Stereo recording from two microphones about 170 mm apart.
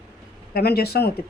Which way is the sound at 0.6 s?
65° left (ahead or behind).